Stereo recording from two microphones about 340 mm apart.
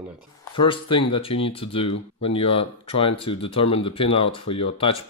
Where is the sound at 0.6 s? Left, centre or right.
Centre.